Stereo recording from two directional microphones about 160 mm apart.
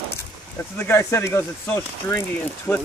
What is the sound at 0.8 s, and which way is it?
Speech, 15° left (ahead or behind).